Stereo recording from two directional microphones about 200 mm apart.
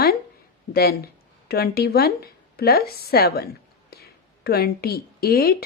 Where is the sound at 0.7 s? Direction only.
50° left (ahead or behind).